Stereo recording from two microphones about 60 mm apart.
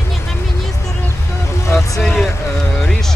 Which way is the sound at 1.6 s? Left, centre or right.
Left.